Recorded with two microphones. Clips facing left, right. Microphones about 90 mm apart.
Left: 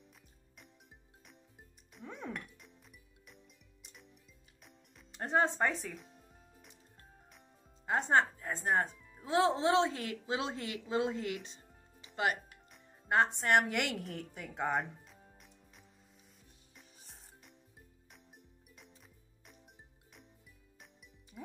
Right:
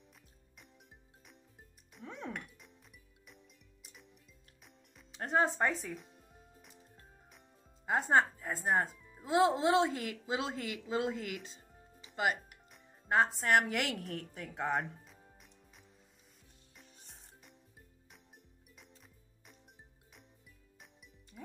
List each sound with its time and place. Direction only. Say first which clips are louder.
1.2 s music: left 1 dB; centre (ahead or behind)
7.3 s speech: even; 5° right (ahead or behind)
16.7 s music: even; centre (ahead or behind)